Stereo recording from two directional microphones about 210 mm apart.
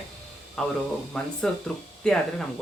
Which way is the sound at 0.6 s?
5° left (ahead or behind).